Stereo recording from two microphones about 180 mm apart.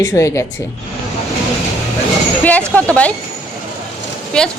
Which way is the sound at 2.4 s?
10° left (ahead or behind).